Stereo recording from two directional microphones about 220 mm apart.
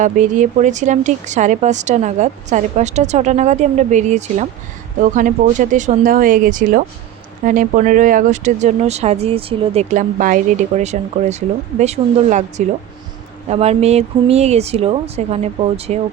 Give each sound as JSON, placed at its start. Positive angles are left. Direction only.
{"t": 0.0, "sound": "speech", "side_deg": -35}